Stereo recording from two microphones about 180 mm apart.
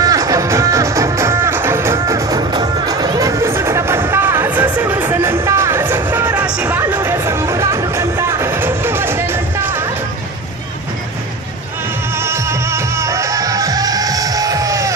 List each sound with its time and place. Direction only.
0.0 s music: 20° right (ahead or behind)
12.2 s music: 15° right (ahead or behind)